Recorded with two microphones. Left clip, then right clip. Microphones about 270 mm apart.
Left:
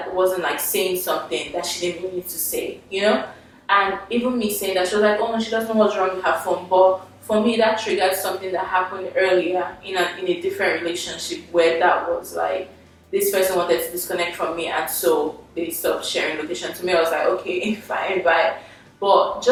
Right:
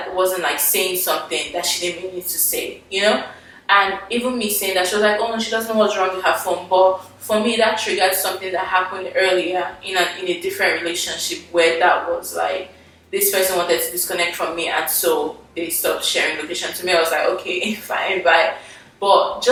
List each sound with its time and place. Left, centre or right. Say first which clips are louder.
0.0 s a woman's voice: right 1 dB; centre
6.7 s speech: right 1 dB; left
7.3 s a woman's voice: right 1 dB; centre
18.9 s speech: right 2 dB; left